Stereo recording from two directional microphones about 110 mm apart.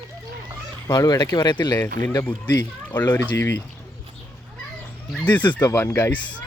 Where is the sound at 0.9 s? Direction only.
35° left (ahead or behind).